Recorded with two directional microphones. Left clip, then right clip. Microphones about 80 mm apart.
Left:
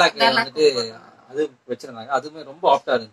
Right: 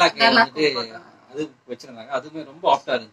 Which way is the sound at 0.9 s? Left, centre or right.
Right.